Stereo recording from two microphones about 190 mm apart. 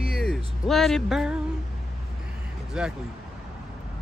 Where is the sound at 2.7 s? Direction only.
5° right (ahead or behind).